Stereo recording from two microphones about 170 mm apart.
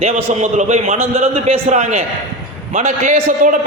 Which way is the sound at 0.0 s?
40° right (ahead or behind).